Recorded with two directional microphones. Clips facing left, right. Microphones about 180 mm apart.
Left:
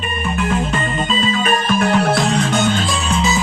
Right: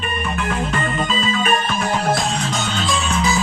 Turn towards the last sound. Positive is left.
turn(degrees=35)  # may be behind; listen again after turning